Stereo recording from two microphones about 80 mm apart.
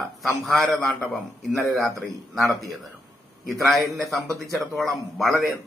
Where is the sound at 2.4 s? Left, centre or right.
Right.